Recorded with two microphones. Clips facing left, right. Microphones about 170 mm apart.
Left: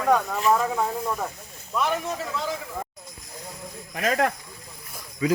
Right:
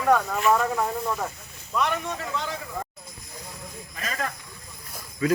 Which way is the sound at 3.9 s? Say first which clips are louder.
Left 9 dB; 65° left (ahead or behind).